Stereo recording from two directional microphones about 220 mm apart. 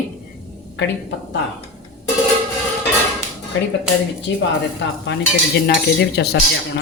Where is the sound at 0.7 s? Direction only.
55° left (ahead or behind).